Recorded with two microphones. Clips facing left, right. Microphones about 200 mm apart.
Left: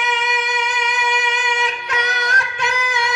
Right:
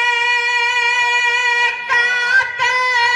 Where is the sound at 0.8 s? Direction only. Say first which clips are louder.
Left 2 dB; 25° right (ahead or behind).